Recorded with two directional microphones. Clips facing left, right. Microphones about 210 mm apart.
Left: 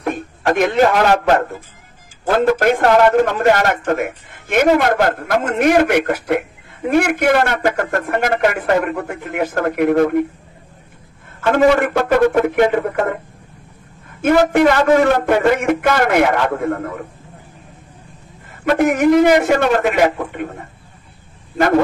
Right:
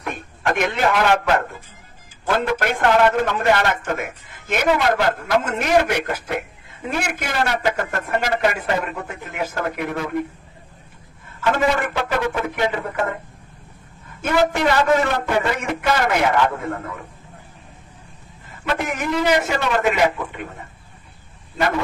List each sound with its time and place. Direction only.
0.0 s a sound: 30° left (ahead or behind)
2.2 s a man's voice: 40° left (ahead or behind)
3.7 s a man's voice: 60° left (ahead or behind)
11.5 s a man's voice: 55° left (ahead or behind)
14.2 s a man's voice: 55° left (ahead or behind)
18.7 s a man's voice: 50° left (ahead or behind)